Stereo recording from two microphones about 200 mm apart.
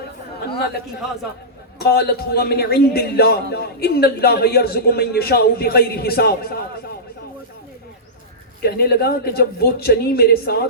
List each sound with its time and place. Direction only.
1.8 s a man's voice: 50° left (ahead or behind)
8.6 s a man's voice: 50° left (ahead or behind)